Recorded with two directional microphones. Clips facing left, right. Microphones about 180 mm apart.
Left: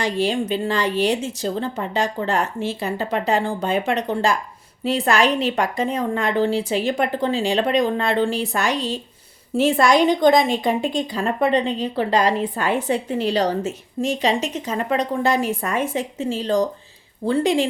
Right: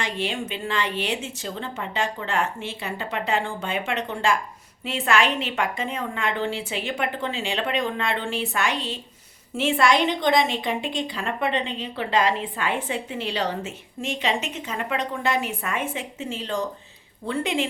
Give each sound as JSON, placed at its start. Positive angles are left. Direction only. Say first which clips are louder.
{"t": 0.0, "sound": "a woman's voice", "louder": "left 7 dB", "side_deg": 35}